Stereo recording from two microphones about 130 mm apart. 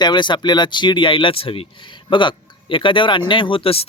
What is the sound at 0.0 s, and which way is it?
Speech, 35° left (ahead or behind).